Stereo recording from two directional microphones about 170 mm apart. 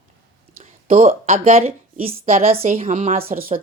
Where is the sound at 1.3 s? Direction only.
35° right (ahead or behind).